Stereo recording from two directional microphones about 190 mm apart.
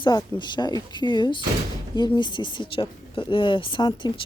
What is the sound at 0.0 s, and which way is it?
A woman's voice, 25° left (ahead or behind).